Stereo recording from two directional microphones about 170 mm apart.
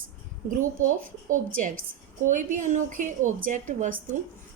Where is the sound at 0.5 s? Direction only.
50° right (ahead or behind).